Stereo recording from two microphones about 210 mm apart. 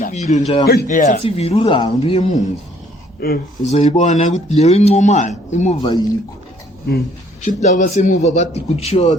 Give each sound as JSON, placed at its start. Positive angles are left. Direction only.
{"t": 0.0, "sound": "speech", "side_deg": 35}
{"t": 0.7, "sound": "speech", "side_deg": 45}
{"t": 1.2, "sound": "speech", "side_deg": 25}
{"t": 3.2, "sound": "speech", "side_deg": 45}
{"t": 3.7, "sound": "speech", "side_deg": 30}
{"t": 5.8, "sound": "speech", "side_deg": 20}
{"t": 7.4, "sound": "speech", "side_deg": 35}